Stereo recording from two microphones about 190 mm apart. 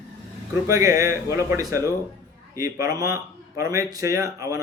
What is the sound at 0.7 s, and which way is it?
Speech, 15° right (ahead or behind).